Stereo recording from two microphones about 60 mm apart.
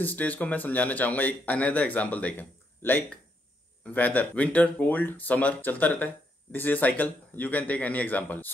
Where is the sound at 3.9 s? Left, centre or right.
Left.